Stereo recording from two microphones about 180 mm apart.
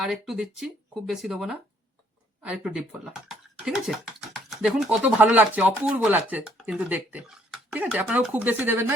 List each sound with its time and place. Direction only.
0.0 s speech: centre (ahead or behind)